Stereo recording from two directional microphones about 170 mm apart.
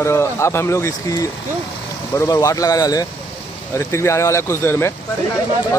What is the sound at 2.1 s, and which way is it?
Speech, 20° left (ahead or behind).